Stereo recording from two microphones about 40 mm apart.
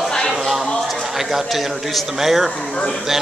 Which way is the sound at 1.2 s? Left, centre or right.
Centre.